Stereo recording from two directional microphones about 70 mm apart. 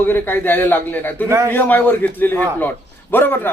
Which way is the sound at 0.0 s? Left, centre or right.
Left.